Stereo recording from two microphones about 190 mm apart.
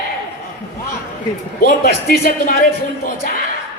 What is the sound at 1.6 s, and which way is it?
A man's voice, 55° left (ahead or behind).